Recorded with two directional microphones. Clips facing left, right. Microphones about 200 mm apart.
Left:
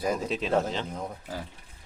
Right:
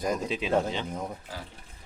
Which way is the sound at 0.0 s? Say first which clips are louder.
Left 1 dB; 5° left (ahead or behind).